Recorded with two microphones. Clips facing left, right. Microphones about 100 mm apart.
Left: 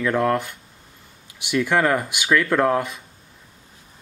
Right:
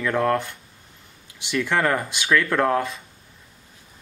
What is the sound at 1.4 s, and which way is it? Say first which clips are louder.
Speech: left 2 dB; 10° left (ahead or behind).